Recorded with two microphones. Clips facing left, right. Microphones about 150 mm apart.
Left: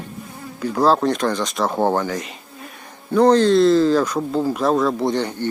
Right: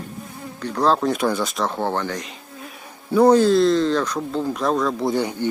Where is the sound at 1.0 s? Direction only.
5° right (ahead or behind).